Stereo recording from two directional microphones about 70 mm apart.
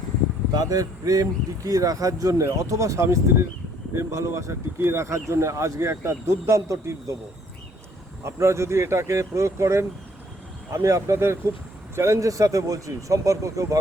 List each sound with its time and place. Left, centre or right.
0.5 s speech: right
8.2 s speech: right